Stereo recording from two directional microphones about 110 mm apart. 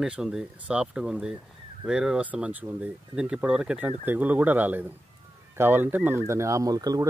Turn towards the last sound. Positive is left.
turn(degrees=-35)  # may be behind; listen again after turning